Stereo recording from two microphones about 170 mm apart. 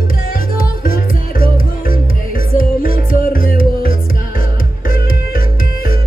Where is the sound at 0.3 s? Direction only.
60° left (ahead or behind).